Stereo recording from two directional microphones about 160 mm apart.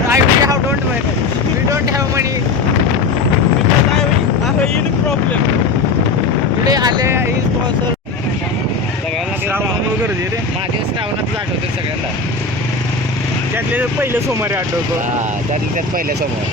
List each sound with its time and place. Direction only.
0.1 s vehicle: 20° right (ahead or behind)
1.7 s vehicle: 20° right (ahead or behind)
6.7 s boat: 25° right (ahead or behind)
13.7 s a sound: 15° right (ahead or behind)